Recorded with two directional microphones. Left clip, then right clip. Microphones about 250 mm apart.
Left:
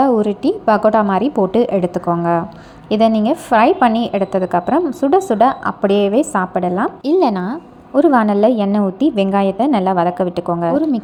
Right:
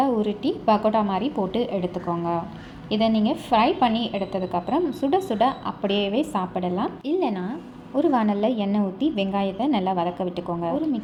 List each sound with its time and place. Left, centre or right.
0.0 s a woman's voice: left